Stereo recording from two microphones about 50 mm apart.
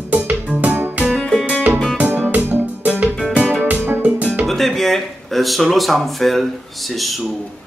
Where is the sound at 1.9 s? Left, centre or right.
Right.